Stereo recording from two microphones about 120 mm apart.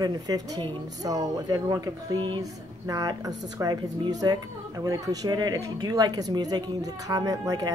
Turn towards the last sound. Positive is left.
turn(degrees=-30)  # may be behind; listen again after turning